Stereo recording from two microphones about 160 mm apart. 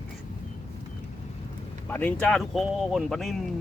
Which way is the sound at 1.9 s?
10° left (ahead or behind).